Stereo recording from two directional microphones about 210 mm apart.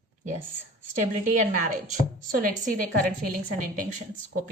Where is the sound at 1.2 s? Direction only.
40° right (ahead or behind).